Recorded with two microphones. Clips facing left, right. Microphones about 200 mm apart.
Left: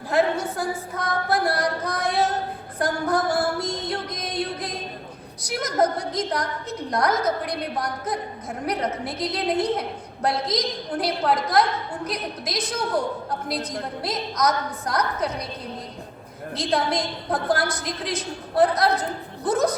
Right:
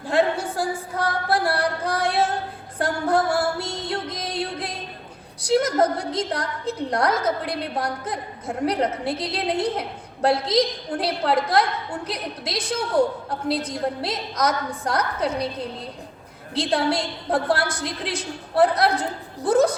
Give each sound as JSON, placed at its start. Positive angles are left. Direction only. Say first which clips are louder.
{"t": 0.1, "sound": "a woman's voice", "louder": "right 1 dB", "side_deg": -30}
{"t": 2.7, "sound": "music", "louder": "right 2 dB", "side_deg": -30}
{"t": 5.4, "sound": "a woman's voice", "louder": "right 4 dB", "side_deg": -30}
{"t": 16.6, "sound": "a woman's voice", "louder": "right 2 dB", "side_deg": -30}